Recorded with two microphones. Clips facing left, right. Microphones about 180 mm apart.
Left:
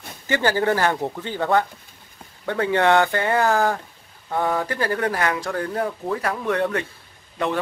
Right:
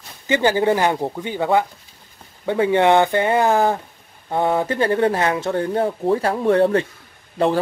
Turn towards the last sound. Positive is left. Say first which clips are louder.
# right 6 dB
turn(degrees=-30)  # may be behind; listen again after turning